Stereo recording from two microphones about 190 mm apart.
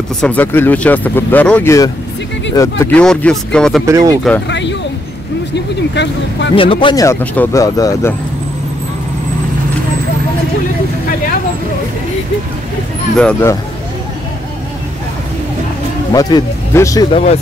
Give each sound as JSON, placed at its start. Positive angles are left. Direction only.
{"t": 0.2, "sound": "speech", "side_deg": 10}
{"t": 3.8, "sound": "speech", "side_deg": -15}
{"t": 4.5, "sound": "a sound", "side_deg": 65}
{"t": 5.5, "sound": "speech", "side_deg": 65}
{"t": 6.5, "sound": "speech", "side_deg": 25}
{"t": 13.2, "sound": "speech", "side_deg": 10}
{"t": 16.1, "sound": "speech", "side_deg": 20}
{"t": 17.1, "sound": "speech", "side_deg": 35}